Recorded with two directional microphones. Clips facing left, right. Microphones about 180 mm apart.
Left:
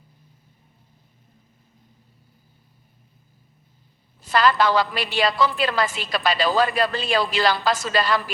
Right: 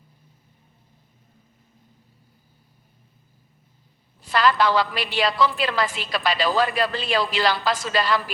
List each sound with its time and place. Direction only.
4.3 s a woman's voice: 40° left (ahead or behind)